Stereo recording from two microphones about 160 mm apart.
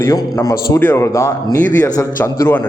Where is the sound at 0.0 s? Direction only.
20° left (ahead or behind).